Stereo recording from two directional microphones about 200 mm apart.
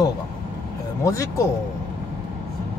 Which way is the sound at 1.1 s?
15° left (ahead or behind).